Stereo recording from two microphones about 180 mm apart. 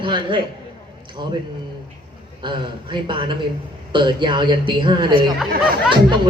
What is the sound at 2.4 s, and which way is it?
Speech, 25° right (ahead or behind).